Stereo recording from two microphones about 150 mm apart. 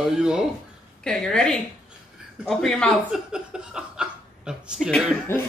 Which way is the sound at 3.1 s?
5° right (ahead or behind).